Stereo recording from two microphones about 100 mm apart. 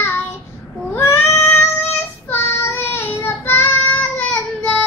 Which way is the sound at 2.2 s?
25° left (ahead or behind).